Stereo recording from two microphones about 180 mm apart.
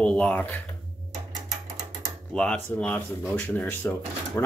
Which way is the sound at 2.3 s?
5° left (ahead or behind).